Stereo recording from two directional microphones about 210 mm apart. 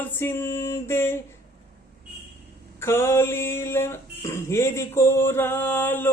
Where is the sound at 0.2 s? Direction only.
10° left (ahead or behind).